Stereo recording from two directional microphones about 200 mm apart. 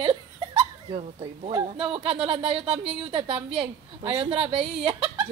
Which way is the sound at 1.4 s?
25° right (ahead or behind).